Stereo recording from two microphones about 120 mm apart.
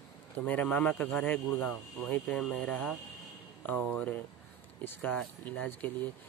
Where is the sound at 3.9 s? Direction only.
10° left (ahead or behind).